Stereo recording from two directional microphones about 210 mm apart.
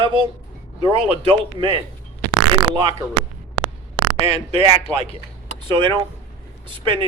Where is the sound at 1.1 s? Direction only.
25° right (ahead or behind).